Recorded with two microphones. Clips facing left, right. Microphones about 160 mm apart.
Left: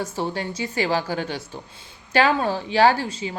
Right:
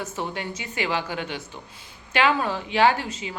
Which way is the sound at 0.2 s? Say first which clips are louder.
Left 5 dB; 35° left (ahead or behind).